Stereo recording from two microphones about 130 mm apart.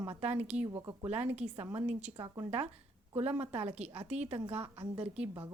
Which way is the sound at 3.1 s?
50° right (ahead or behind).